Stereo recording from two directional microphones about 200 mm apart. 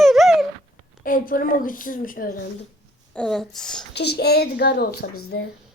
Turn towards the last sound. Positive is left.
turn(degrees=55)  # may be behind; listen again after turning